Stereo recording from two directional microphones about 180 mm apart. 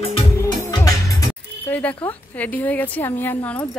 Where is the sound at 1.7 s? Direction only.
10° left (ahead or behind).